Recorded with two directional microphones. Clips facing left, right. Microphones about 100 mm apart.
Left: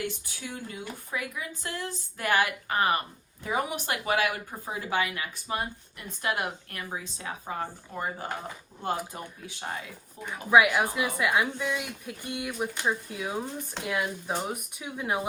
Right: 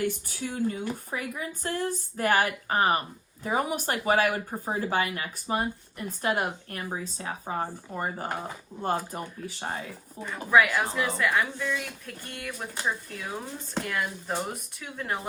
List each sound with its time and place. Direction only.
0.0 s speech: 45° right (ahead or behind)
10.3 s speech: 10° left (ahead or behind)